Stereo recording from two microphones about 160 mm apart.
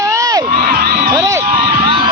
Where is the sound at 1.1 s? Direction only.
20° right (ahead or behind).